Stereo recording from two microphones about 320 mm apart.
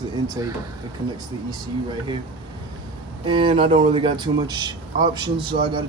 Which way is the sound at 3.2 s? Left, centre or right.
Centre.